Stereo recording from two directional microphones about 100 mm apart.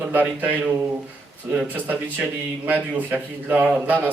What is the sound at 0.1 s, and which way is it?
A man's voice, 15° right (ahead or behind).